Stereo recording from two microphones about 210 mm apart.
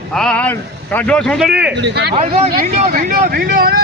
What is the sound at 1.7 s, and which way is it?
Speech, 55° right (ahead or behind).